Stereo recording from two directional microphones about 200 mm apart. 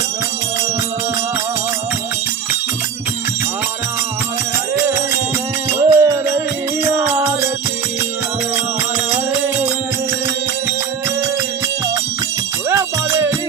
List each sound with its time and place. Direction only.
5.7 s music: 15° right (ahead or behind)
12.6 s music: 15° right (ahead or behind)